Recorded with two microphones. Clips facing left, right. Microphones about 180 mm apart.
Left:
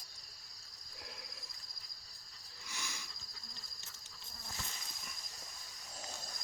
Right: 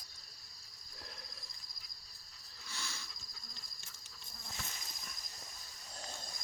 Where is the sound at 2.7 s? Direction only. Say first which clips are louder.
Even; 15° left (ahead or behind).